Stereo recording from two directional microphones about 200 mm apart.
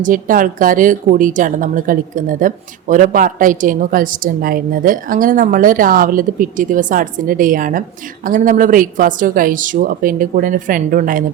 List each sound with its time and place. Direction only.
0.0 s a woman's voice: 45° right (ahead or behind)